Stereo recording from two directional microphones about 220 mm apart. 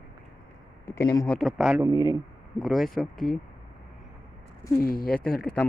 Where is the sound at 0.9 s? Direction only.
10° left (ahead or behind); by 1.9 s 5° right (ahead or behind).